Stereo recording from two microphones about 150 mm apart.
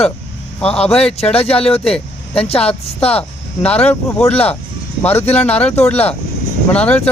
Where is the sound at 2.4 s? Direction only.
40° left (ahead or behind).